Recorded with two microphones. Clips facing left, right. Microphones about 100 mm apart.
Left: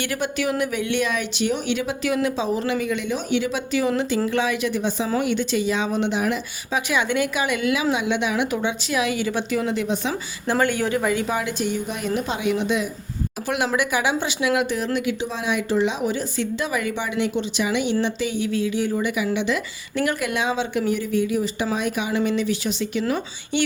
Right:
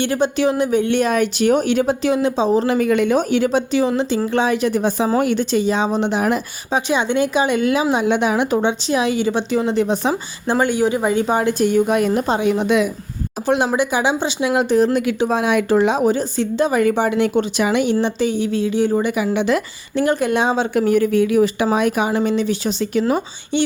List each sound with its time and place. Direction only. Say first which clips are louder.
0.0 s a woman's voice: right 7 dB; 25° right (ahead or behind)
2.0 s a woman's voice: right 2 dB; 25° right (ahead or behind)
2.7 s speech: right 9 dB; 50° right (ahead or behind)
3.7 s a woman's voice: right 4 dB; 25° right (ahead or behind); by 6.4 s 45° right (ahead or behind)
6.7 s a woman's voice: right 4 dB; 30° right (ahead or behind)
10.4 s speech: right 4 dB; 20° right (ahead or behind)
11.6 s speech: right 10 dB; 55° right (ahead or behind); by 12.6 s 40° right (ahead or behind)
12.6 s speech: right 7 dB; 65° right (ahead or behind)
13.7 s speech: right 4 dB; 25° right (ahead or behind)
14.9 s speech: right 7 dB; 50° right (ahead or behind)
18.0 s a woman's voice: right 5 dB; 35° right (ahead or behind)
20.0 s a woman's voice: right 6 dB; 30° right (ahead or behind)
23.5 s speech: right 4 dB; 25° right (ahead or behind)